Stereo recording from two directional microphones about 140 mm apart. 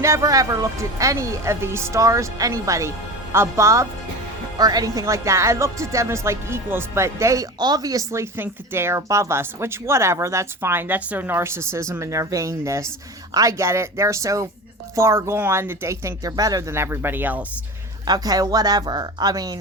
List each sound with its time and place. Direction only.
0.0 s speech: 20° right (ahead or behind)
18.0 s speech: 30° right (ahead or behind)